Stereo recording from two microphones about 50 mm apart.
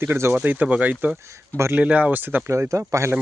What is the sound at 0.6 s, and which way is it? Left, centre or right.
Speech, right.